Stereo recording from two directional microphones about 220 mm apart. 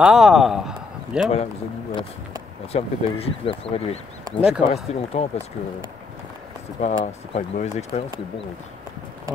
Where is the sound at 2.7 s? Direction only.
25° left (ahead or behind).